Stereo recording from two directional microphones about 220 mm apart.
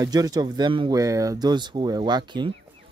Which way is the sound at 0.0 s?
15° right (ahead or behind).